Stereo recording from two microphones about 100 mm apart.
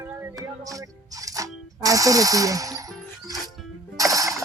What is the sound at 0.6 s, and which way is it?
Music, 35° right (ahead or behind).